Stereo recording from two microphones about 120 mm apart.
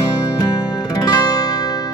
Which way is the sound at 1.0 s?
30° left (ahead or behind).